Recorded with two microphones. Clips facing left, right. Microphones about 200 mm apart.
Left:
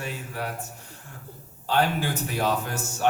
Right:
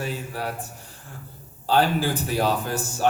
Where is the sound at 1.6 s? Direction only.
35° right (ahead or behind).